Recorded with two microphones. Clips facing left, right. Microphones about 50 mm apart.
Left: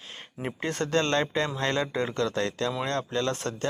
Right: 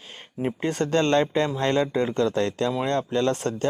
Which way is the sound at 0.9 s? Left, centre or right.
Right.